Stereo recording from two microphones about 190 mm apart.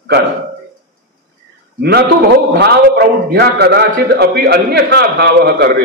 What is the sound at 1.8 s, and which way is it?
A man's voice, 55° right (ahead or behind).